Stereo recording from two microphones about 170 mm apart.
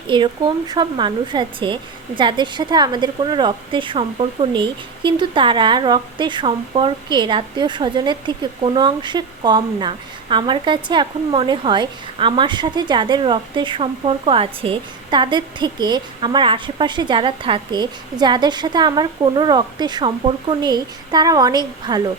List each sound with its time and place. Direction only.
0.1 s a woman's voice: 25° right (ahead or behind)